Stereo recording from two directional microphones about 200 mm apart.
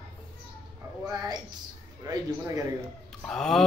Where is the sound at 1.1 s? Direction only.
20° right (ahead or behind).